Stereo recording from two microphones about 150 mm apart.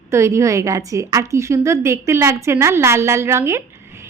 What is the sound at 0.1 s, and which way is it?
Speech, 20° right (ahead or behind).